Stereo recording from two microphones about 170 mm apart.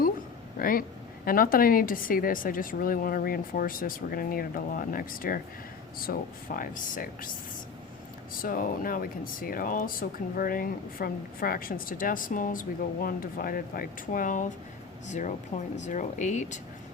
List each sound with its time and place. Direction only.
0.6 s speech: 60° left (ahead or behind)
8.4 s speech: 55° left (ahead or behind)